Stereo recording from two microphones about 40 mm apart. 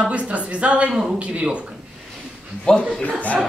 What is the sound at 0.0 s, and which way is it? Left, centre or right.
A woman's voice, right.